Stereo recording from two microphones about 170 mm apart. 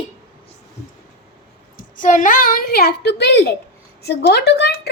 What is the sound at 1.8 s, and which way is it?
A woman's voice, 50° left (ahead or behind).